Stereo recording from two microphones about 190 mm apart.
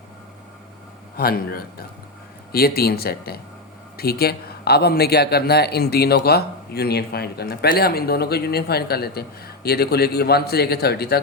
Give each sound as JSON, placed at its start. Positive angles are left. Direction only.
{"t": 1.1, "sound": "a man's voice", "side_deg": 55}